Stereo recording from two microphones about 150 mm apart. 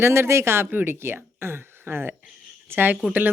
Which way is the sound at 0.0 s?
15° right (ahead or behind).